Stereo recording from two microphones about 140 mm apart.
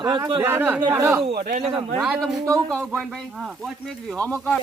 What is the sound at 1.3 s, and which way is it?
Speech, 85° right.